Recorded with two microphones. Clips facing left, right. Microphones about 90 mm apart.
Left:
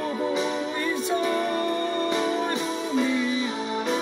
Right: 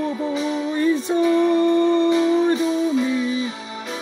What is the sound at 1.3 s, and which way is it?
Music, 45° left (ahead or behind).